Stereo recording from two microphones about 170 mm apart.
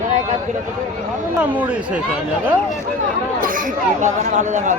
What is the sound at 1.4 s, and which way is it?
Speech, 5° right (ahead or behind).